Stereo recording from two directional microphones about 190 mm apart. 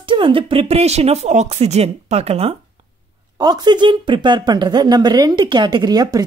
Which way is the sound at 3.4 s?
20° right (ahead or behind).